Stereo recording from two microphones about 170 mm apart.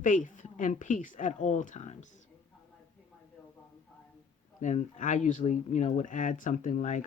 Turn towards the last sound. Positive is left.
turn(degrees=45)  # may be behind; listen again after turning